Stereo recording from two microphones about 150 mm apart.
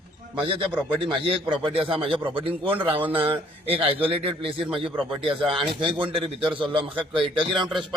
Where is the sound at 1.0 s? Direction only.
35° right (ahead or behind).